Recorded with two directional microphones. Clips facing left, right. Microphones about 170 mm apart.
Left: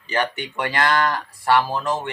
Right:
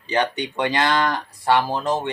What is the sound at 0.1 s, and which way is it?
Speech, 20° right (ahead or behind).